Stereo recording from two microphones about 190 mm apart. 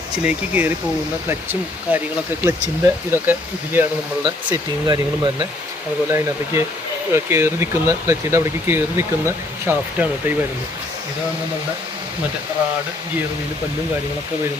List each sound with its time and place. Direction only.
0.3 s speech: 10° right (ahead or behind)
4.9 s speech: 25° right (ahead or behind)
6.1 s speech: 15° right (ahead or behind)